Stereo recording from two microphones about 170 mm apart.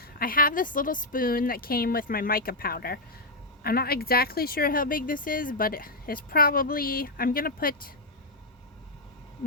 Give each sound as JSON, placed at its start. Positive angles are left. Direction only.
{"t": 0.0, "sound": "speech", "side_deg": 60}